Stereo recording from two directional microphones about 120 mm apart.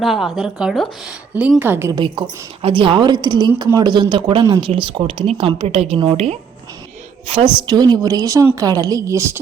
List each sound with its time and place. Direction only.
0.0 s a woman's voice: centre (ahead or behind); by 1.9 s 15° right (ahead or behind)
2.0 s a woman's voice: 50° right (ahead or behind)
7.3 s speech: 50° right (ahead or behind)
7.7 s a woman's voice: 35° right (ahead or behind)